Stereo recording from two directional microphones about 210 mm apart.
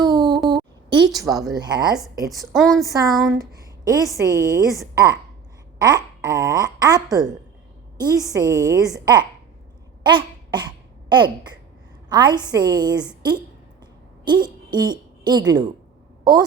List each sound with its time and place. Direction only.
0.0 s a sound: 20° right (ahead or behind)
1.5 s a woman's voice: 20° right (ahead or behind)
2.4 s a woman's voice: centre (ahead or behind)
2.8 s speech: 15° right (ahead or behind)
3.1 s a woman's voice: centre (ahead or behind)
3.3 s a sound: 15° right (ahead or behind)
4.2 s speech: 15° right (ahead or behind)
5.8 s a woman's voice: 15° right (ahead or behind)
10.0 s a sound: 20° right (ahead or behind)
12.0 s a woman's voice: 20° right (ahead or behind)